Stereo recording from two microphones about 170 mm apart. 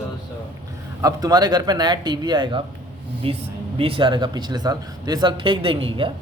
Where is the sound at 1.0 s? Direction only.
20° right (ahead or behind).